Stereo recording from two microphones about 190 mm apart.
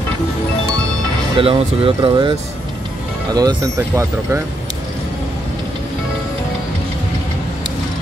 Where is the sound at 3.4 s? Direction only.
20° right (ahead or behind).